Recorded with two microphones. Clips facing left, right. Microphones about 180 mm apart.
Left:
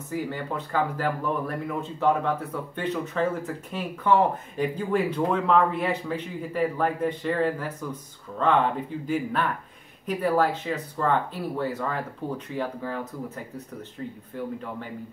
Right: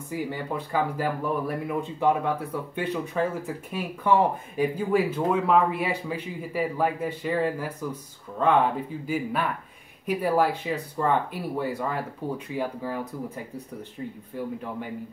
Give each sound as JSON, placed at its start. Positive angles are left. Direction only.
{"t": 0.1, "sound": "speech", "side_deg": -10}